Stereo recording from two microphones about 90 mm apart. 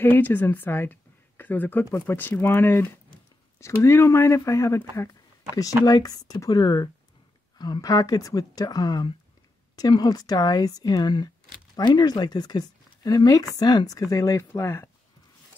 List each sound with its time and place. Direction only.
0.0 s a woman's voice: 20° left (ahead or behind)
5.9 s speech: 45° left (ahead or behind)